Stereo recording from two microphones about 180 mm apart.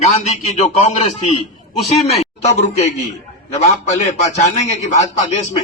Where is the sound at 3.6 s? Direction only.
40° left (ahead or behind).